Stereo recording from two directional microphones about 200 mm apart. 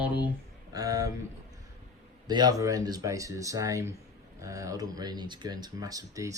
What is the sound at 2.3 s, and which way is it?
Speech, 20° right (ahead or behind).